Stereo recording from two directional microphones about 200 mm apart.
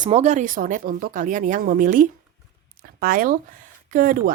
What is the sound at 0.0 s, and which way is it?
Speech, 35° right (ahead or behind).